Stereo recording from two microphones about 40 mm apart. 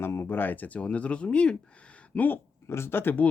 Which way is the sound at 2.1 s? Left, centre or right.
Left.